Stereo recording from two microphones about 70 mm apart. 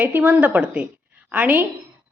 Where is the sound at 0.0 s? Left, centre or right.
Right.